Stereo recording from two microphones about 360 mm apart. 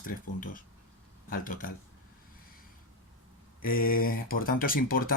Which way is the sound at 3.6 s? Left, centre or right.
Left.